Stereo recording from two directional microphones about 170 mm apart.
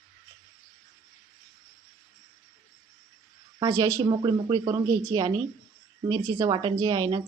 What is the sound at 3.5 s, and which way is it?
A woman's voice, 20° right (ahead or behind).